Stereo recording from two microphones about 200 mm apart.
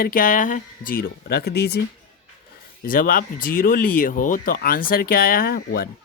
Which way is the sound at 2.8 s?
45° left (ahead or behind).